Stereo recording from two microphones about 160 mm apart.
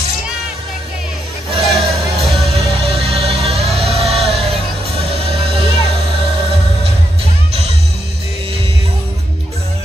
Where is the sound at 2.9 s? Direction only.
40° right (ahead or behind).